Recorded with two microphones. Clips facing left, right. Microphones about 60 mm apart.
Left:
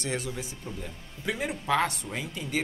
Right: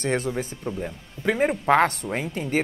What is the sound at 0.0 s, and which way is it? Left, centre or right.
Speech, right.